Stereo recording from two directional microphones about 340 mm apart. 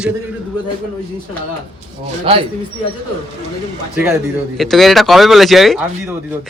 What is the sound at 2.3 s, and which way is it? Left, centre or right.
Speech, centre.